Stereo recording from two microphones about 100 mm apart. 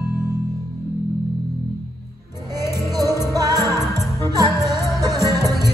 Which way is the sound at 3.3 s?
40° right (ahead or behind).